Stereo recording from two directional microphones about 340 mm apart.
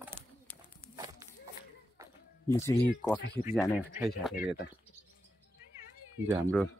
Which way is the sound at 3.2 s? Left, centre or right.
Left.